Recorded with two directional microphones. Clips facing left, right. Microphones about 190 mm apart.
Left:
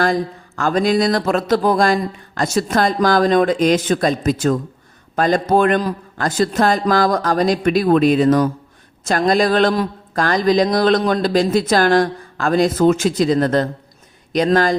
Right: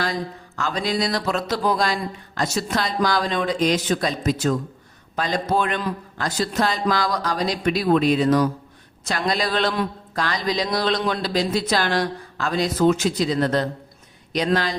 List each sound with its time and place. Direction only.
0.0 s a man's voice: 50° left (ahead or behind)